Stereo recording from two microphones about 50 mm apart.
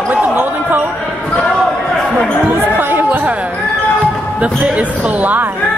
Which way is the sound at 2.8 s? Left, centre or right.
Right.